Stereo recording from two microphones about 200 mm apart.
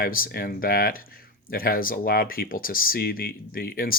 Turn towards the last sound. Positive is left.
turn(degrees=45)  # may be behind; listen again after turning